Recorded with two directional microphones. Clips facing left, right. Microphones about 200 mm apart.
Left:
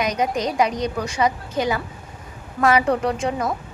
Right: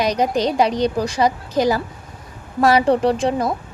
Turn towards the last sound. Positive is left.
turn(degrees=-35)  # may be behind; listen again after turning